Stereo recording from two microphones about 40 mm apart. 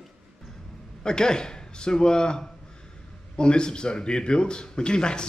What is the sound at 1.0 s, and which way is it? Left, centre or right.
A man's voice, centre.